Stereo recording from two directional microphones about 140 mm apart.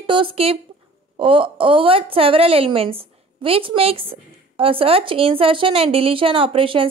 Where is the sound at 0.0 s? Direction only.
35° right (ahead or behind).